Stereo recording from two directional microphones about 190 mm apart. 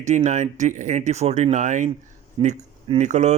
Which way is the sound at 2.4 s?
25° right (ahead or behind).